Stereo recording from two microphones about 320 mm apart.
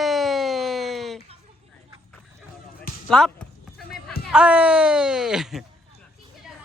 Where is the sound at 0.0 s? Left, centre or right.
Centre.